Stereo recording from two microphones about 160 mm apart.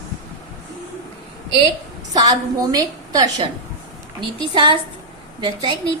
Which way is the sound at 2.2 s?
25° right (ahead or behind).